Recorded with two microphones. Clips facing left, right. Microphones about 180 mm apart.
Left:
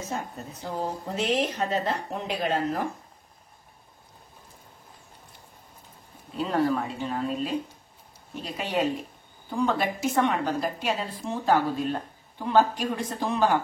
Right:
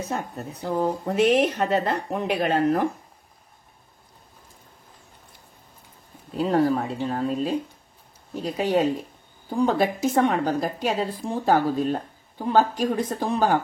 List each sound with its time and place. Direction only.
0.1 s speech: 60° right (ahead or behind)
6.3 s a woman's voice: 40° right (ahead or behind)
8.5 s a woman's voice: 40° right (ahead or behind)